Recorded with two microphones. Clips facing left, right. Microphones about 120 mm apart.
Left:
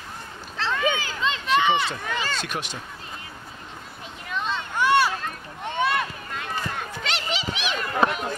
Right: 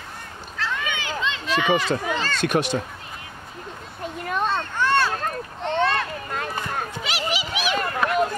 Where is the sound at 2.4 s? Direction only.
60° right (ahead or behind).